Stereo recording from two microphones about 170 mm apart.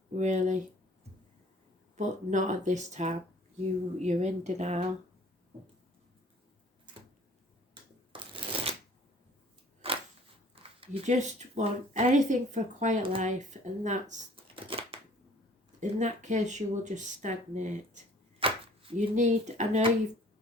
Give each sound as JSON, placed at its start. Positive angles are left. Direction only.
{"t": 0.2, "sound": "speech", "side_deg": -45}
{"t": 2.0, "sound": "speech", "side_deg": -45}
{"t": 7.7, "sound": "shuffling cards", "side_deg": -30}
{"t": 9.8, "sound": "a sound", "side_deg": -35}
{"t": 10.5, "sound": "speech", "side_deg": -35}
{"t": 14.5, "sound": "a sound", "side_deg": -30}
{"t": 15.8, "sound": "speech", "side_deg": -45}
{"t": 18.3, "sound": "speech", "side_deg": -35}